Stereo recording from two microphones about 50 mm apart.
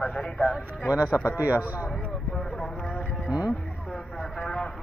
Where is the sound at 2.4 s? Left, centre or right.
Centre.